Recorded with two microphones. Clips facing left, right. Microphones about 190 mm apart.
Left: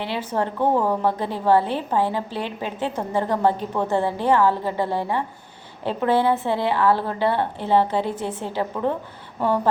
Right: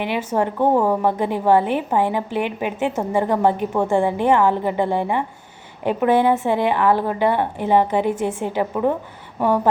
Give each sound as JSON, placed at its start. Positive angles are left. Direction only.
{"t": 0.3, "sound": "a woman's voice", "side_deg": -15}